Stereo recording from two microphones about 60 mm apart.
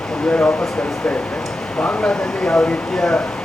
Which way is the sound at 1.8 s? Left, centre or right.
Centre.